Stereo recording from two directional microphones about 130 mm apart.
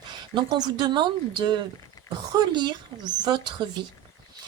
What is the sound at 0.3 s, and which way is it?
Speech, 35° right (ahead or behind).